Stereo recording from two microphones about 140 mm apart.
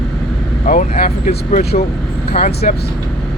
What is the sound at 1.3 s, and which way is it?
Speech, 65° left (ahead or behind).